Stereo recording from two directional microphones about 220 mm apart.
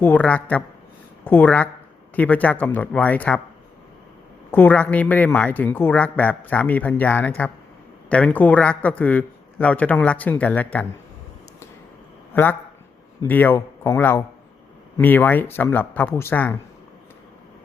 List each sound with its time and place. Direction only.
0.0 s speech: 5° left (ahead or behind)
4.5 s speech: 10° left (ahead or behind)
12.3 s speech: 10° left (ahead or behind)